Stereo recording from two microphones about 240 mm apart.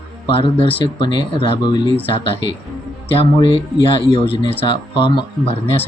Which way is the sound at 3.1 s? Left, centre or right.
Left.